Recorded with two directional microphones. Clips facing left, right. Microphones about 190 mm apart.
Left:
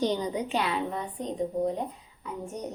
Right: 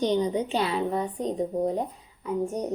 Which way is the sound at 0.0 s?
20° right (ahead or behind).